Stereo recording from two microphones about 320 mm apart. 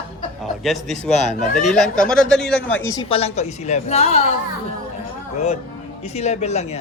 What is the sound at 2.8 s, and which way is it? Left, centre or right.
A woman's voice, centre.